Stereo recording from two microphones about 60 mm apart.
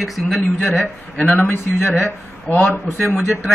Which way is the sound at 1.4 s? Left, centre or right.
Left.